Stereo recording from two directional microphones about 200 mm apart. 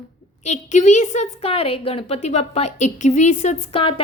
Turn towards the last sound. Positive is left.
turn(degrees=25)  # may be behind; listen again after turning